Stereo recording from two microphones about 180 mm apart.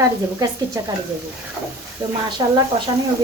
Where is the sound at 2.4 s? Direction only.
25° right (ahead or behind).